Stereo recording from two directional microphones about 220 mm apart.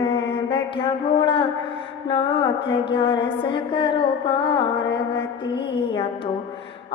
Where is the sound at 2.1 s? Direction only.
25° left (ahead or behind).